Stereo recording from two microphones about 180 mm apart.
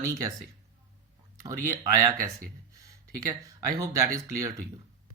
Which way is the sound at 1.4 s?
20° right (ahead or behind).